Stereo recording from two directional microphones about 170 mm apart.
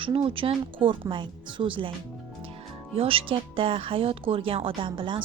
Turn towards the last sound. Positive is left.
turn(degrees=-30)  # may be behind; listen again after turning